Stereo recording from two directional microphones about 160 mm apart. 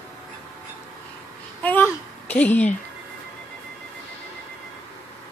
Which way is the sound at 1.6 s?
10° left (ahead or behind).